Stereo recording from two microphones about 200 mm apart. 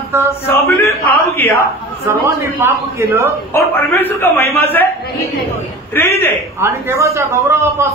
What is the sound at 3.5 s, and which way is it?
A man's voice, 10° left (ahead or behind).